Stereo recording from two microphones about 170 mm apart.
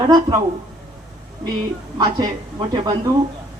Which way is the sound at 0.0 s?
25° right (ahead or behind).